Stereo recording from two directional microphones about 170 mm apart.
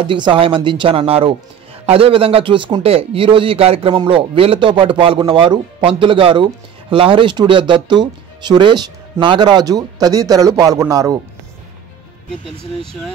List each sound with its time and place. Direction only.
0.0 s a man's voice: 30° right (ahead or behind)